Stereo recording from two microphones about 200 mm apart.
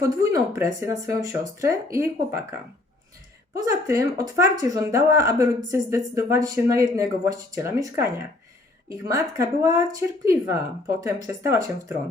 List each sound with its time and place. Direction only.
0.0 s speech: 15° right (ahead or behind)
3.5 s speech: 15° right (ahead or behind)